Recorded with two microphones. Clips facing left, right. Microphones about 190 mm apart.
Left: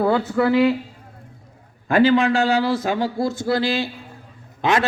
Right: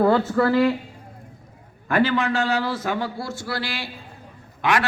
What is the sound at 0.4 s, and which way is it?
Speech, 20° left (ahead or behind).